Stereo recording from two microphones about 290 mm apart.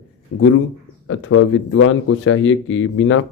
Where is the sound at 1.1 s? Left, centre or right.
Left.